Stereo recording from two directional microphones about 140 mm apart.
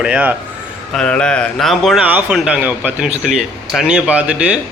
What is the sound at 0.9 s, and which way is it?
A man's voice, 5° left (ahead or behind).